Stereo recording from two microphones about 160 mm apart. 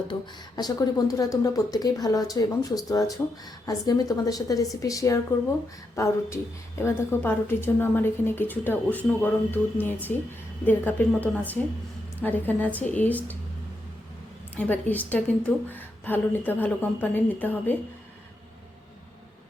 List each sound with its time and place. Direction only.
0.1 s a woman's voice: 25° left (ahead or behind); by 13.3 s 10° left (ahead or behind)
14.5 s a woman's voice: 10° left (ahead or behind)